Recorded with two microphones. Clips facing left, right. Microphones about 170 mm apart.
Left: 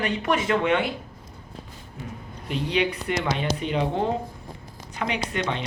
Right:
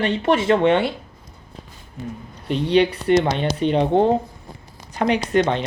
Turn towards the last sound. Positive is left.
turn(degrees=-35)  # may be behind; listen again after turning